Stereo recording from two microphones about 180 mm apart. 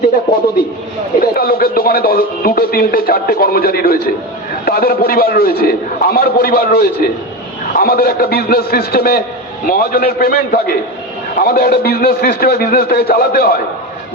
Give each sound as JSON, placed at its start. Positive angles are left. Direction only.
{"t": 1.2, "sound": "speech", "side_deg": 55}